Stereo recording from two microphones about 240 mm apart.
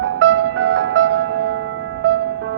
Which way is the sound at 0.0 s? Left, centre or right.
Right.